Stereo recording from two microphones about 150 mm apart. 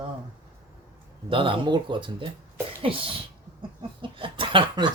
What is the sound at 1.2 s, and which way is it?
A woman's voice, 35° right (ahead or behind).